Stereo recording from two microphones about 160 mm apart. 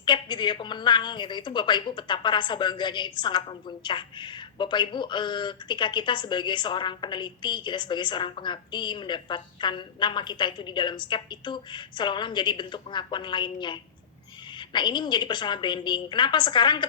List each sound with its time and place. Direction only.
0.0 s speech: 30° left (ahead or behind)